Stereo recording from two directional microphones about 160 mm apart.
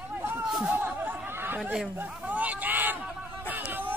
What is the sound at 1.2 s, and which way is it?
Chatter, 15° right (ahead or behind).